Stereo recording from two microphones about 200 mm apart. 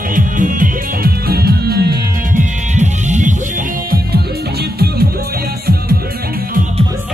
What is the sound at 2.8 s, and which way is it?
Music, 35° right (ahead or behind).